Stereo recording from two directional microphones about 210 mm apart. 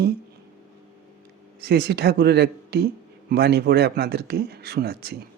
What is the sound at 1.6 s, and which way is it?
Speech, 50° right (ahead or behind).